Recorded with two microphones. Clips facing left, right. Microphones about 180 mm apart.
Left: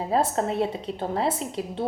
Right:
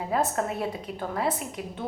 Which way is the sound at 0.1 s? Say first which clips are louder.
Left 3 dB; 25° left (ahead or behind).